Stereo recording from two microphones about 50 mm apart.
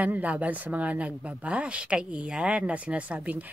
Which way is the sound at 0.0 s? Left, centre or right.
Right.